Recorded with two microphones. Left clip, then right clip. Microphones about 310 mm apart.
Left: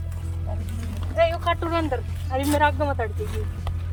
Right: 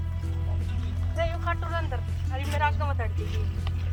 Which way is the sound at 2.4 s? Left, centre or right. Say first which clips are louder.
Left 7 dB; left.